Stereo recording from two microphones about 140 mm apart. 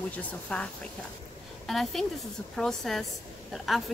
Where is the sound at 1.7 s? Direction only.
Centre (ahead or behind).